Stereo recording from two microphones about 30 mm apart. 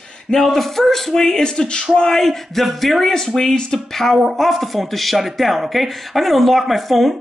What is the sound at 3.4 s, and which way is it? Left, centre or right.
Speech, left.